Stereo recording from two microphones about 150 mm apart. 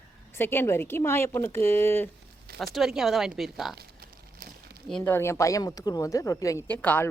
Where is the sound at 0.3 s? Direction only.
15° left (ahead or behind).